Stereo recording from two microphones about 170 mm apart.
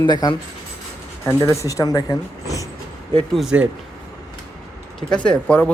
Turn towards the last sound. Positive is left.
turn(degrees=5)  # may be behind; listen again after turning